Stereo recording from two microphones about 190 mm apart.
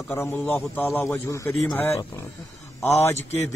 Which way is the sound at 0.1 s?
10° left (ahead or behind).